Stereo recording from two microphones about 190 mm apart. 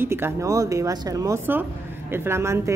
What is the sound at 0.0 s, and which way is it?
Speech, 10° right (ahead or behind).